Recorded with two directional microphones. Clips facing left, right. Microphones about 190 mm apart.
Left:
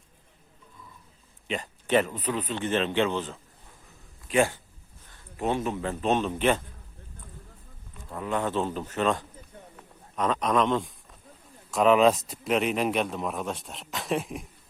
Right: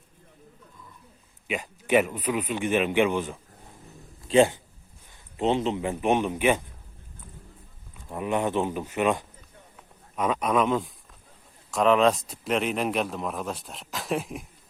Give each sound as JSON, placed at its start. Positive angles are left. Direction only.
{"t": 1.5, "sound": "speech", "side_deg": -10}
{"t": 4.3, "sound": "speech", "side_deg": -25}
{"t": 8.1, "sound": "speech", "side_deg": -20}